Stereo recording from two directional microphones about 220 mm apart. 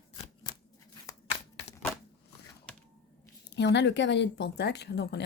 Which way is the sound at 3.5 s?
50° left (ahead or behind).